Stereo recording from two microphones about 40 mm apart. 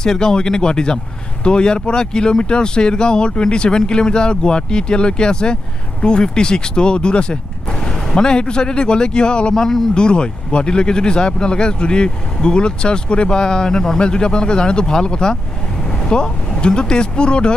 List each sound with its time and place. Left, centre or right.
0.0 s speech: centre